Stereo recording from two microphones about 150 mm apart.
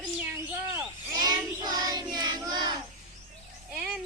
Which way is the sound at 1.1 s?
30° right (ahead or behind).